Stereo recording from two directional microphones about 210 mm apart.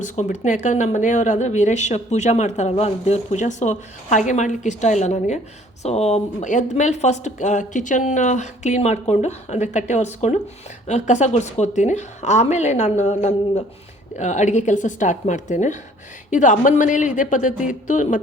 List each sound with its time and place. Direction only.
0.0 s speech: 35° left (ahead or behind)